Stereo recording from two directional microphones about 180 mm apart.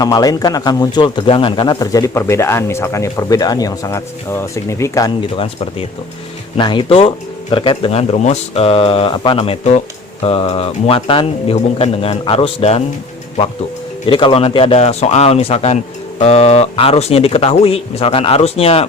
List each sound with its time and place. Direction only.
0.0 s a man's voice: 20° left (ahead or behind)
5.4 s a man's voice: 30° left (ahead or behind)
14.1 s speech: 30° left (ahead or behind)